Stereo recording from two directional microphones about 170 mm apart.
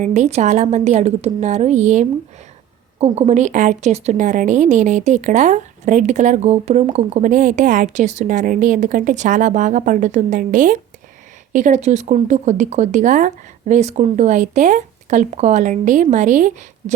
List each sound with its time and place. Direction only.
0.0 s speech: 45° right (ahead or behind)